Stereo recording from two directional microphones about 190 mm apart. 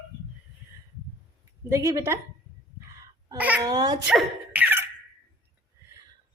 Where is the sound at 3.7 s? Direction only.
20° right (ahead or behind).